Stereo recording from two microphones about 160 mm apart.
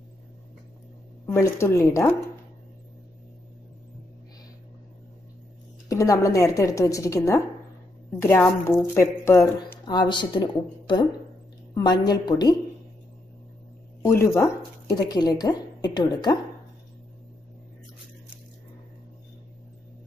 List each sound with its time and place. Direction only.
1.2 s speech: 15° left (ahead or behind)
5.9 s speech: 20° left (ahead or behind)
9.8 s speech: 30° left (ahead or behind)
14.0 s speech: 20° left (ahead or behind)